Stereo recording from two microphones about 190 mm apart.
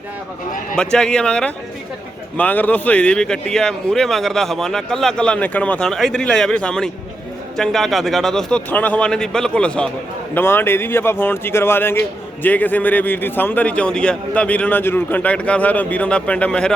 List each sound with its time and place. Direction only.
0.8 s a man's voice: 5° left (ahead or behind)